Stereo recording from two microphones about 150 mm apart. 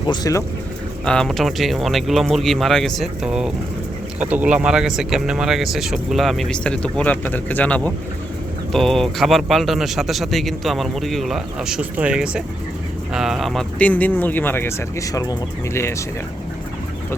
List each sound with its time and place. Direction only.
0.1 s speech: 25° left (ahead or behind)
1.0 s speech: 5° left (ahead or behind)